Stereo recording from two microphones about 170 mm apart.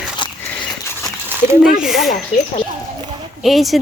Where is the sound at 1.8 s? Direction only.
Centre (ahead or behind).